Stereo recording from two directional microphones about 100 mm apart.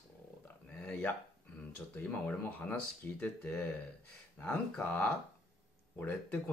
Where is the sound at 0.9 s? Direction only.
20° left (ahead or behind).